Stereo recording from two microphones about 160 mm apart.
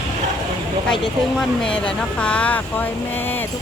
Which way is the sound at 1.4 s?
5° left (ahead or behind).